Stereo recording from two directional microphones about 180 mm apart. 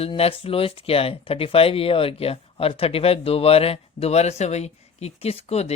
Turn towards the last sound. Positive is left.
turn(degrees=35)  # may be behind; listen again after turning